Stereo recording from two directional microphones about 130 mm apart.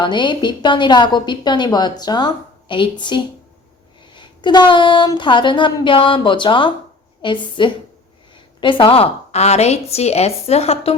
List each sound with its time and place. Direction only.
0.0 s a woman's voice: 35° left (ahead or behind); by 10.9 s 50° left (ahead or behind)